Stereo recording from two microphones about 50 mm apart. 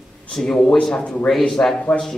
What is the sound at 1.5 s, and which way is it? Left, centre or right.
Speech, centre.